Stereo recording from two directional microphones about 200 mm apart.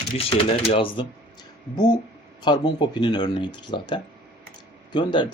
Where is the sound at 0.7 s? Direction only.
25° left (ahead or behind).